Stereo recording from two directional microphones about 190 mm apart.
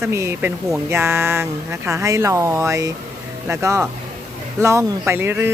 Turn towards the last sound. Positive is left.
turn(degrees=-10)  # may be behind; listen again after turning